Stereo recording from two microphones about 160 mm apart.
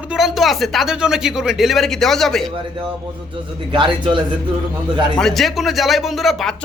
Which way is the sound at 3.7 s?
30° right (ahead or behind).